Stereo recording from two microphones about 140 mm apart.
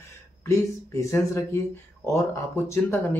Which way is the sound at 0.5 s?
20° left (ahead or behind).